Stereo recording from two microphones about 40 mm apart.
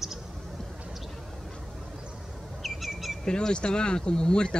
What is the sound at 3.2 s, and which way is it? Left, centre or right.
Speech, left.